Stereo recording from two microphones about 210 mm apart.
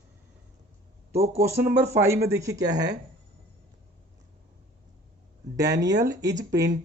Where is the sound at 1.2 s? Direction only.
10° right (ahead or behind).